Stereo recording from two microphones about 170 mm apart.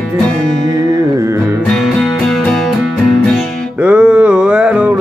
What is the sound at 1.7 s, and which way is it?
Music, centre (ahead or behind).